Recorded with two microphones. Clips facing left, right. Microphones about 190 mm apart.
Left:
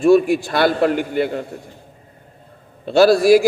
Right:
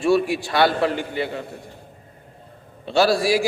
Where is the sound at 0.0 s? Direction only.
50° left (ahead or behind).